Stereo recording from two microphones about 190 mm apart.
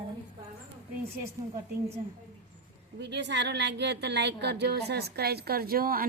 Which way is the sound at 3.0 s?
65° right (ahead or behind).